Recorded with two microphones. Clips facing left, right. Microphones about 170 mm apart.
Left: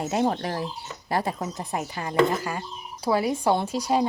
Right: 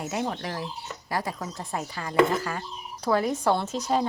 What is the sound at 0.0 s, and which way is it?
Speech, 30° left (ahead or behind).